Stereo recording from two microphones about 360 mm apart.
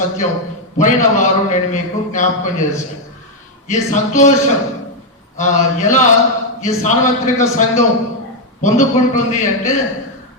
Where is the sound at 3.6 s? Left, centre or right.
Centre.